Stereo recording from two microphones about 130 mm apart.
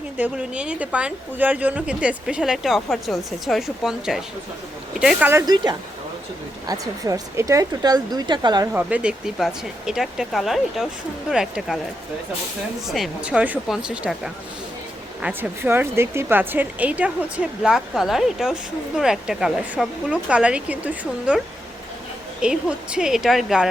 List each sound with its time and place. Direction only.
0.2 s speech: 10° right (ahead or behind)
5.3 s a woman's voice: 30° right (ahead or behind)
8.6 s speech: 10° right (ahead or behind)
12.9 s speech: 5° right (ahead or behind)
15.2 s speech: 15° right (ahead or behind)